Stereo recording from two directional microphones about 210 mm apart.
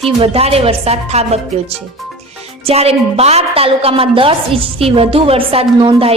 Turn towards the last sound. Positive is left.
turn(degrees=-25)  # may be behind; listen again after turning